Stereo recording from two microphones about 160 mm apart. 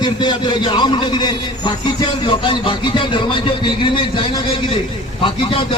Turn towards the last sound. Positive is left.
turn(degrees=35)  # may be behind; listen again after turning